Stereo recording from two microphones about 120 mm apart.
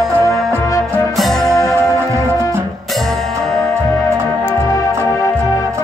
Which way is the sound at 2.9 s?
Centre (ahead or behind).